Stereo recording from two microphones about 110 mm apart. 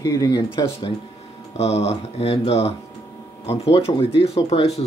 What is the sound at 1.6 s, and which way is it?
Speech, 75° left (ahead or behind).